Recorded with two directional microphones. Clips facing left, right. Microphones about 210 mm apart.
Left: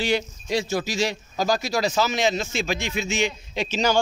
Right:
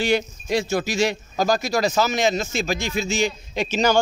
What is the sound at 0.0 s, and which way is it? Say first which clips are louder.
Speech: right 3 dB; 50° right (ahead or behind).